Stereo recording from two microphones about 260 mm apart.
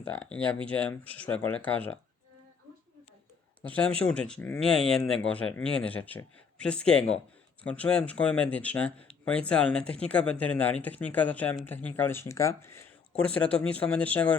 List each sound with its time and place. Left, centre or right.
0.0 s speech: centre
3.7 s speech: centre